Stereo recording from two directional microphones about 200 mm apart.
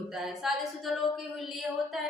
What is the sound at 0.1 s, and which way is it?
A woman's voice, centre (ahead or behind).